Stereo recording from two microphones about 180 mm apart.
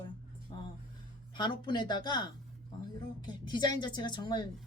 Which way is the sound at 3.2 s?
25° left (ahead or behind).